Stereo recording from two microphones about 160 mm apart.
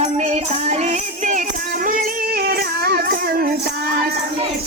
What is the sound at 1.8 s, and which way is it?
Music, 65° right (ahead or behind).